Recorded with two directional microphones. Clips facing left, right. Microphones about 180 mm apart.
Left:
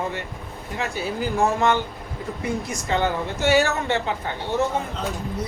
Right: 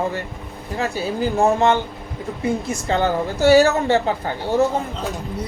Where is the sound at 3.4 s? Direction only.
35° right (ahead or behind).